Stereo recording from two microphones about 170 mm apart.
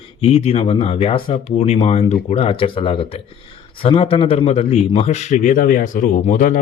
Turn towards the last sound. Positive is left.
turn(degrees=50)  # may be behind; listen again after turning